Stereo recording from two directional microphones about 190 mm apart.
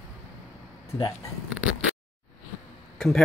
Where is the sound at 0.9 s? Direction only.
20° left (ahead or behind).